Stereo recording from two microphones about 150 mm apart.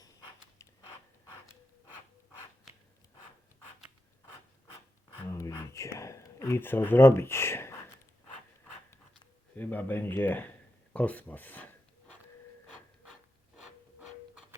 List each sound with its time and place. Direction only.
5.3 s a sound: 20° left (ahead or behind)
6.0 s speech: 20° left (ahead or behind)
9.6 s speech: 10° left (ahead or behind)